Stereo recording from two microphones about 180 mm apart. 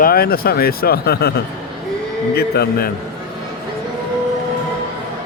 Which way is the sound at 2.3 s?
60° left (ahead or behind).